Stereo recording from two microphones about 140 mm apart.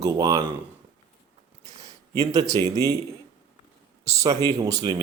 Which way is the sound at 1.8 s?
25° right (ahead or behind).